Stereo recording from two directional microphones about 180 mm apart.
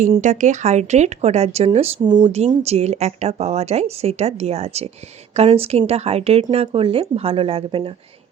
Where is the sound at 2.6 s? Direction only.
35° right (ahead or behind).